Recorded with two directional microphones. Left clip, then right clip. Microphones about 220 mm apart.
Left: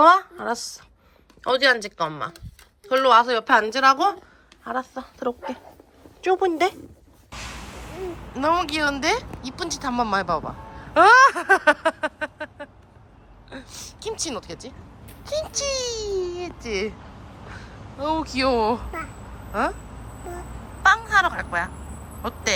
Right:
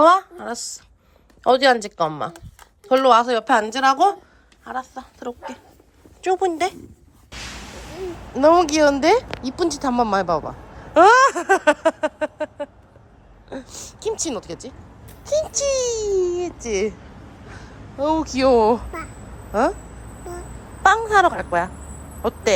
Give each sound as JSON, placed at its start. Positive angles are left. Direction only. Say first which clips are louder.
{"t": 0.0, "sound": "a woman's voice", "louder": "right 1 dB", "side_deg": -15}
{"t": 1.5, "sound": "a child's voice", "louder": "right 4 dB", "side_deg": -15}
{"t": 8.3, "sound": "a child's voice", "louder": "right 7 dB", "side_deg": -15}
{"t": 20.8, "sound": "a woman's voice", "louder": "right 3 dB", "side_deg": -20}